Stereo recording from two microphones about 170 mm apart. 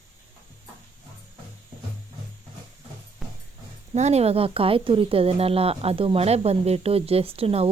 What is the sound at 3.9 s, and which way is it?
Speech, 40° right (ahead or behind).